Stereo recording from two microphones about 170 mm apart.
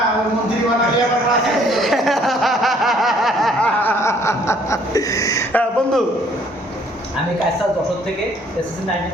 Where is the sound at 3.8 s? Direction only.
15° left (ahead or behind).